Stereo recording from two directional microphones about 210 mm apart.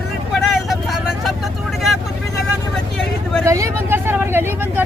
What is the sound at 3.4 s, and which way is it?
Vehicle, 15° right (ahead or behind).